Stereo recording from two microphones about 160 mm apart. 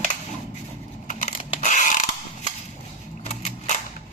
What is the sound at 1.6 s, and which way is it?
Mechanisms, 50° left (ahead or behind).